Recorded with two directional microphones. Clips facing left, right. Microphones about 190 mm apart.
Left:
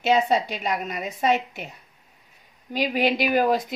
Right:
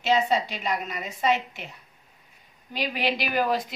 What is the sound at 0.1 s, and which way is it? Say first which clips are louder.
Speech: left 2 dB; 50° left (ahead or behind).